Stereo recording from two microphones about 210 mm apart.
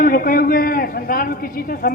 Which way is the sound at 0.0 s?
45° left (ahead or behind).